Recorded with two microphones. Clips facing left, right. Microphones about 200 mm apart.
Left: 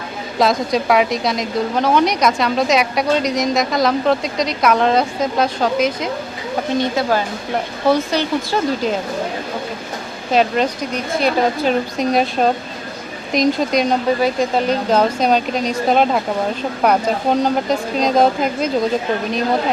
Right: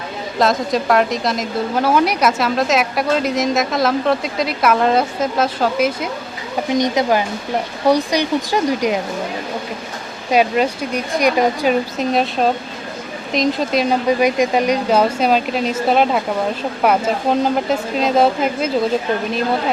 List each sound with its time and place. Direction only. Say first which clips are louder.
0.3 s speech: left 1 dB; centre (ahead or behind)
6.7 s speech: right 2 dB; 15° right (ahead or behind)
10.3 s speech: right 1 dB; 10° right (ahead or behind)
14.2 s speech: right 2 dB; 15° right (ahead or behind)